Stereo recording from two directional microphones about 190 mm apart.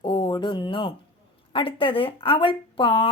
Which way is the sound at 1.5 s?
25° left (ahead or behind).